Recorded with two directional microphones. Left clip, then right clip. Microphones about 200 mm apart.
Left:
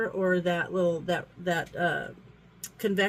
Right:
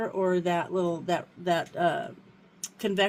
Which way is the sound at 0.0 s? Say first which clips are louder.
Even; 25° right (ahead or behind).